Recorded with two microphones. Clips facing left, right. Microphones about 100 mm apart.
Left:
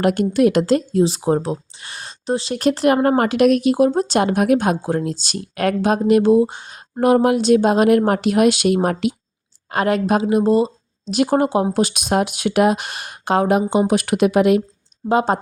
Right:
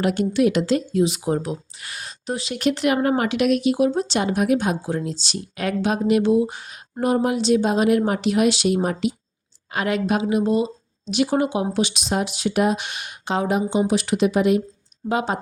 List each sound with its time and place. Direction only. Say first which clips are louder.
0.0 s speech: left 3 dB; 50° left (ahead or behind)
7.0 s speech: left 6 dB; 65° left (ahead or behind)
9.7 s speech: left 4 dB; 40° left (ahead or behind); by 12.7 s 70° left (ahead or behind)
12.7 s speech: left 2 dB; 40° left (ahead or behind)
13.3 s speech: left 5 dB; 55° left (ahead or behind)
15.1 s speech: left 6 dB; 35° left (ahead or behind)